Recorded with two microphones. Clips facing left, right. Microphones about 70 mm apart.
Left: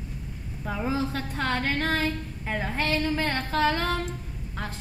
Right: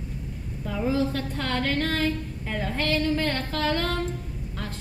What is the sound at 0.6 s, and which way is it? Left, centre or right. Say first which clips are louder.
A woman's voice: right 3 dB; left.